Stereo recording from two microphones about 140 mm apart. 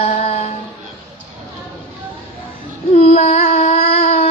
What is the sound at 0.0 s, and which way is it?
Music, 50° left (ahead or behind).